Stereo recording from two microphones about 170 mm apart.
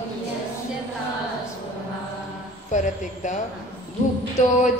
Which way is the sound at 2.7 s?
45° left (ahead or behind).